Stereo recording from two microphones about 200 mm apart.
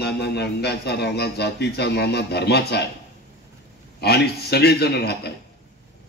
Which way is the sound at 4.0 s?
55° left (ahead or behind).